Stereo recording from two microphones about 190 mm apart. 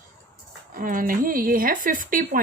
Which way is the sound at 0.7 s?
45° right (ahead or behind).